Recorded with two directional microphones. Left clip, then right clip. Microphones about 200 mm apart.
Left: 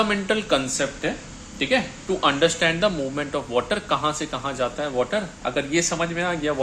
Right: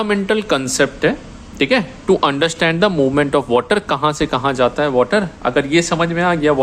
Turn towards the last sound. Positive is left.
turn(degrees=-25)  # may be behind; listen again after turning